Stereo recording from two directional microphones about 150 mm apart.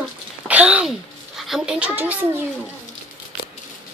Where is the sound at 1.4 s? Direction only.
5° right (ahead or behind).